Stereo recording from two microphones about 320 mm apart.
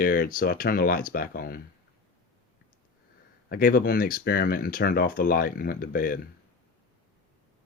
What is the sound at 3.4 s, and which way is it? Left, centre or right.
Speech, left.